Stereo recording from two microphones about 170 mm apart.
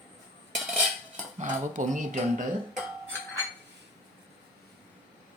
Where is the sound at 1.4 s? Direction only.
45° right (ahead or behind).